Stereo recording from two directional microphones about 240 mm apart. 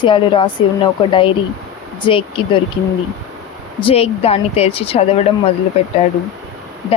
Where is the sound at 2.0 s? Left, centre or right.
Left.